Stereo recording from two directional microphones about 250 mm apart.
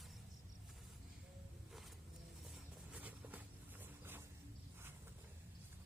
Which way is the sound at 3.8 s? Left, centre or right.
Centre.